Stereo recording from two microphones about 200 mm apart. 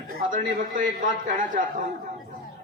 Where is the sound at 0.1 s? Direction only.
40° right (ahead or behind).